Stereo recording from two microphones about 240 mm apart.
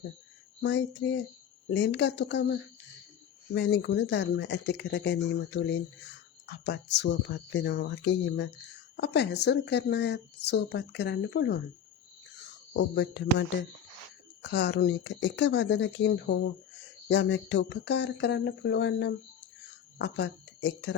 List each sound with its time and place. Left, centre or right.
0.6 s speech: left
12.7 s speech: left